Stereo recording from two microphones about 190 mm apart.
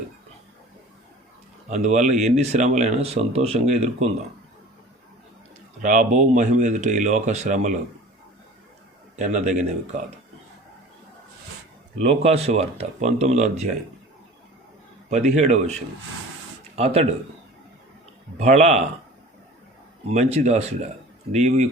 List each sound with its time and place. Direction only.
1.7 s speech: 35° right (ahead or behind)
5.8 s speech: 45° right (ahead or behind)
9.1 s speech: 40° right (ahead or behind)
11.9 s speech: 35° right (ahead or behind)
15.1 s speech: 35° right (ahead or behind)
16.7 s speech: 35° right (ahead or behind)
18.3 s speech: 35° right (ahead or behind)
20.1 s speech: 35° right (ahead or behind)